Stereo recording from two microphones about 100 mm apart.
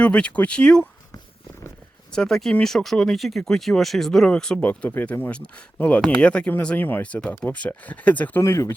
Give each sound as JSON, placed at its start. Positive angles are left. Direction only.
{"t": 0.0, "sound": "speech", "side_deg": 10}
{"t": 2.1, "sound": "speech", "side_deg": 5}
{"t": 8.4, "sound": "speech", "side_deg": 30}